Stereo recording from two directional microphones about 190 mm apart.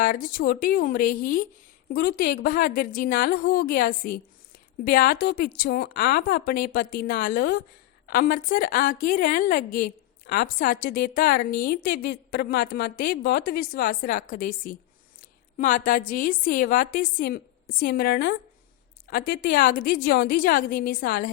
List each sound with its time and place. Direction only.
0.0 s a woman's voice: 45° left (ahead or behind)